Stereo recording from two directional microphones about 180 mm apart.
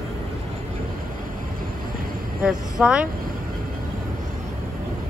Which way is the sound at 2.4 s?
5° right (ahead or behind).